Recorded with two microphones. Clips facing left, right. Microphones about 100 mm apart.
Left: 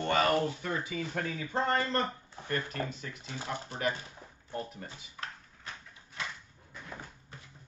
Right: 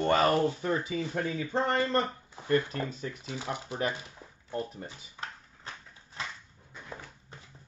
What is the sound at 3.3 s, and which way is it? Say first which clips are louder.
Speech: right 1 dB; 15° right (ahead or behind).